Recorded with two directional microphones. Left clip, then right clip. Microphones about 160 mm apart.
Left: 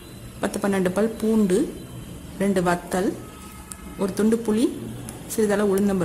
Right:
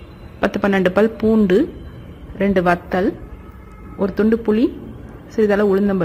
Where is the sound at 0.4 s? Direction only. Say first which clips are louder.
Right 7 dB; 10° right (ahead or behind).